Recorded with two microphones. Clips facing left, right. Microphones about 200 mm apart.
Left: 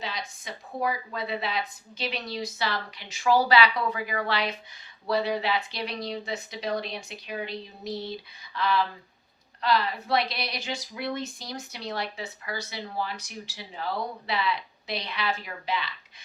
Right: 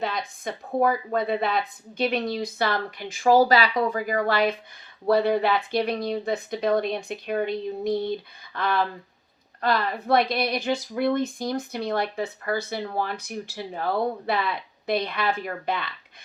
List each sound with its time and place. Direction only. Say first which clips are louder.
0.0 s speech: right 7 dB; 55° right (ahead or behind)